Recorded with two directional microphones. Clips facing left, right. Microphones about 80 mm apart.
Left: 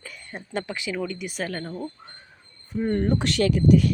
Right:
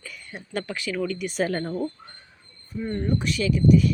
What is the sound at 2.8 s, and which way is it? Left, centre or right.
Speech, left.